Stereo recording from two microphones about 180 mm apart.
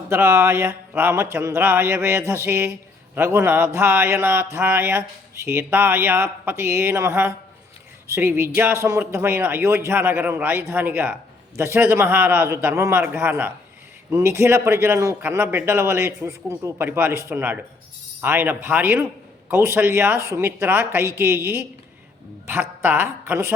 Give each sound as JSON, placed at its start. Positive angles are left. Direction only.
{"t": 0.1, "sound": "a man's voice", "side_deg": -15}
{"t": 22.8, "sound": "a man's voice", "side_deg": -10}